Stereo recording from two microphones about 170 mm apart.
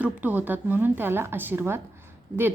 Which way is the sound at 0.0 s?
10° right (ahead or behind).